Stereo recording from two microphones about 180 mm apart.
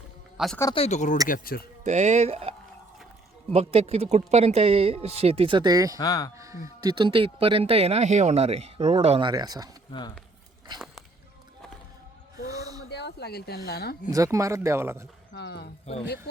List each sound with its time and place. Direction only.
0.3 s speech: centre (ahead or behind)
0.7 s speech: 35° left (ahead or behind)
1.3 s speech: 55° left (ahead or behind)
1.8 s speech: 40° right (ahead or behind); by 6.0 s 20° right (ahead or behind)
6.0 s speech: 20° left (ahead or behind)
6.3 s speech: 15° right (ahead or behind); by 9.3 s 35° right (ahead or behind)
9.3 s speech: 20° right (ahead or behind)
9.9 s speech: 20° left (ahead or behind)
12.5 s a sound: 20° right (ahead or behind)
12.9 s a sound: 70° left (ahead or behind)
13.7 s speech: 60° left (ahead or behind)
14.1 s speech: 15° right (ahead or behind)
15.3 s speech: 75° left (ahead or behind)